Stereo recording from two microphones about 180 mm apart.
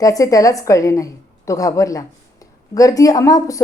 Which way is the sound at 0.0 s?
20° left (ahead or behind).